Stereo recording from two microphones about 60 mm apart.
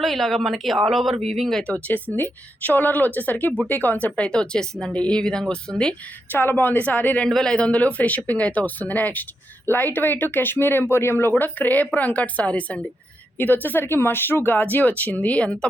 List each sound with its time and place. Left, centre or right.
0.0 s speech: centre
2.1 s speech: left; by 6.0 s centre
6.3 s speech: left
7.3 s speech: centre
13.4 s speech: left; by 15.7 s centre